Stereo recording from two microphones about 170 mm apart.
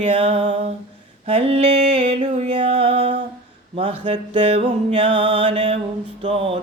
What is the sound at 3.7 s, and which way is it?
Mantra, 30° right (ahead or behind).